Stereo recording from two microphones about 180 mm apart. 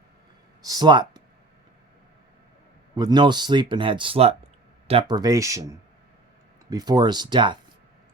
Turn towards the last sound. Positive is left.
turn(degrees=-25)  # may be behind; listen again after turning